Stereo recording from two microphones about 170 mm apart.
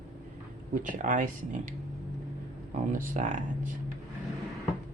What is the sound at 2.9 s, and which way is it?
Speech, 50° right (ahead or behind).